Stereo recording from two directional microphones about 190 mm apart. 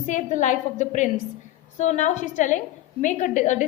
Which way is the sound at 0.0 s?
40° left (ahead or behind).